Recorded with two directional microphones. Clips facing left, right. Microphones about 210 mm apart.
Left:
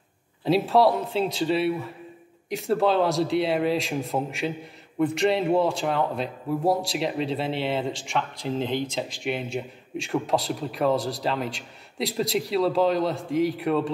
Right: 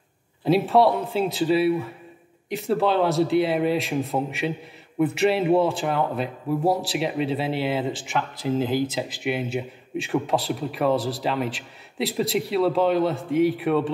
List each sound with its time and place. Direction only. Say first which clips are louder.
0.5 s speech: right 1 dB; centre (ahead or behind)